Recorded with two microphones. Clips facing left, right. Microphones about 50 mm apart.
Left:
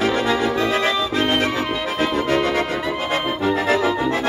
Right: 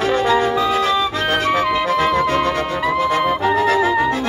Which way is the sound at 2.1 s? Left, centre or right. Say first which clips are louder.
Right 4 dB; right.